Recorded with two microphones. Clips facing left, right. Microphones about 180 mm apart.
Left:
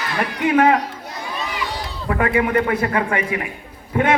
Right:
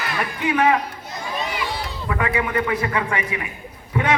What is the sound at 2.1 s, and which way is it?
A man's voice, 40° left (ahead or behind).